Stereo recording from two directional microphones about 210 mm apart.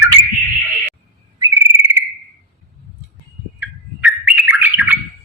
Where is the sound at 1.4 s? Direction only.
15° right (ahead or behind).